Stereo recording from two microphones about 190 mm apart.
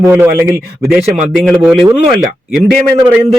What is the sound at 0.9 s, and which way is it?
Speech, centre (ahead or behind).